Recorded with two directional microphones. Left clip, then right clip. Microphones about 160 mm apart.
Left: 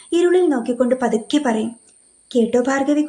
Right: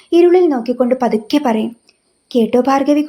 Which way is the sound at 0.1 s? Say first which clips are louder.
Right 5 dB; 20° right (ahead or behind).